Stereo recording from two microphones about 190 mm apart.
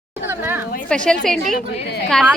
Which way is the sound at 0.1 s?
10° right (ahead or behind).